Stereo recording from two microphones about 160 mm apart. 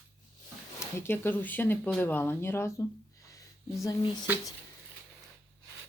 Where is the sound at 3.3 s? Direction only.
20° left (ahead or behind).